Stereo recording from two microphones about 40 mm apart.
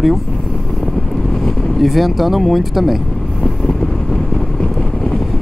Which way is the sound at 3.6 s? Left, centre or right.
Centre.